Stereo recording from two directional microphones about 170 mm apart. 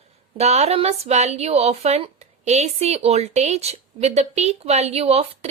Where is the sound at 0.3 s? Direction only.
40° right (ahead or behind).